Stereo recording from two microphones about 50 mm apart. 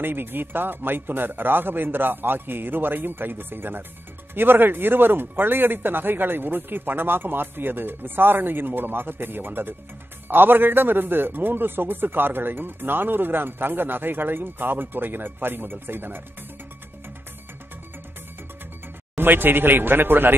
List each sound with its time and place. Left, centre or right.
0.0 s a man's voice: right
19.1 s a man's voice: right